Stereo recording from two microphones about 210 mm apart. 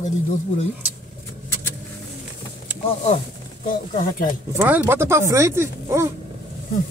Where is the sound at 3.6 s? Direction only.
40° left (ahead or behind).